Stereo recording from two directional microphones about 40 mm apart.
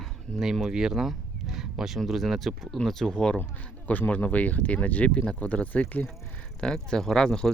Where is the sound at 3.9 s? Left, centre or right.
Left.